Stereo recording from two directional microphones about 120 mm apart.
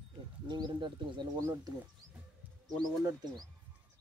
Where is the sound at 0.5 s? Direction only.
40° right (ahead or behind).